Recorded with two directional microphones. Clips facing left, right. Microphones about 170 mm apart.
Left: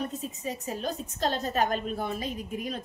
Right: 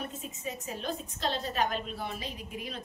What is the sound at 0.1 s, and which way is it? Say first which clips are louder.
A woman's voice: left 4 dB; 35° left (ahead or behind).